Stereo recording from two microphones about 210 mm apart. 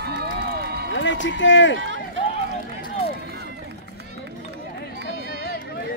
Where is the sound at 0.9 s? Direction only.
60° left (ahead or behind).